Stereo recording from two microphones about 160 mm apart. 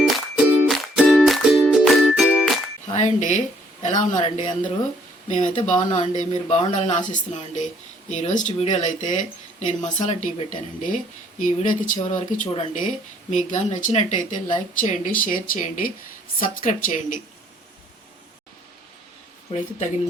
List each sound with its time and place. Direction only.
0.0 s music: 5° right (ahead or behind)
2.9 s speech: 50° left (ahead or behind)
5.9 s speech: 45° left (ahead or behind)
19.5 s speech: 40° left (ahead or behind)